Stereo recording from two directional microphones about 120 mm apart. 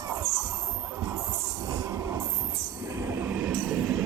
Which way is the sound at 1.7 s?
30° right (ahead or behind).